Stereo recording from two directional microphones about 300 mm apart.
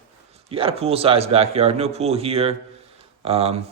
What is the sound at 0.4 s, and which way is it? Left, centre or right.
Speech, centre.